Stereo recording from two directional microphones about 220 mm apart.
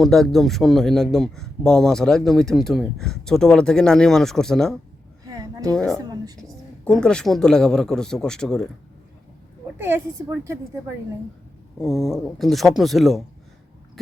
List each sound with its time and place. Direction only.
0.0 s a man's voice: centre (ahead or behind)
5.4 s a sound: 15° right (ahead or behind)
5.7 s a man's voice: 5° left (ahead or behind)
6.1 s a sound: 15° right (ahead or behind)
6.8 s a man's voice: 5° left (ahead or behind)
9.7 s a woman's voice: 10° right (ahead or behind)
11.8 s a man's voice: centre (ahead or behind)